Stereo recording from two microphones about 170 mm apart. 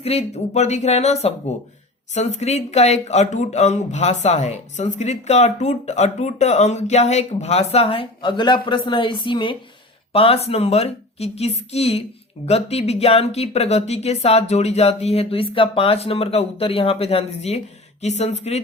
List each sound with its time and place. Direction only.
0.0 s speech: 35° left (ahead or behind)